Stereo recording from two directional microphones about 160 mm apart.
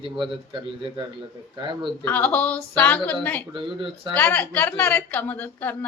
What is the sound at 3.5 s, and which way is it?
Speech, 30° right (ahead or behind).